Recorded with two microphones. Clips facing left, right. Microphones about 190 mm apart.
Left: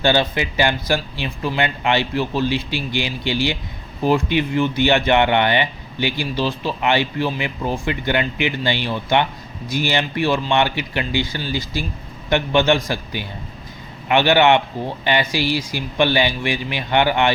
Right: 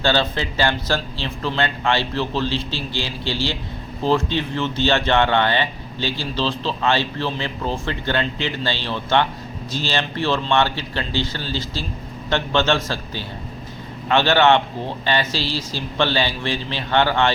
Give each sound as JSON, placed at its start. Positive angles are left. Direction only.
{"t": 0.0, "sound": "speech", "side_deg": 15}